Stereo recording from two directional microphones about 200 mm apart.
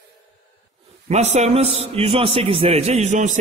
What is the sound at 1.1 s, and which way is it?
A man's voice, 35° right (ahead or behind).